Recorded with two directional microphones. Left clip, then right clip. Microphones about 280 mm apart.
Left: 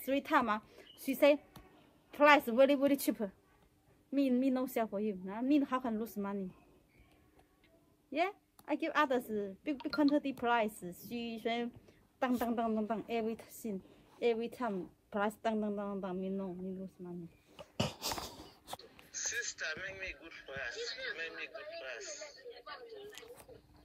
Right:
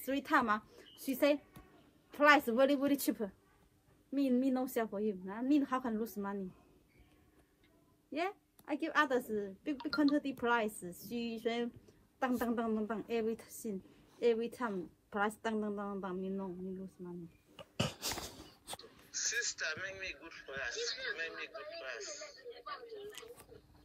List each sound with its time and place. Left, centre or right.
0.0 s a woman's voice: centre
8.1 s a woman's voice: centre
17.6 s a sound: centre
18.8 s speech: centre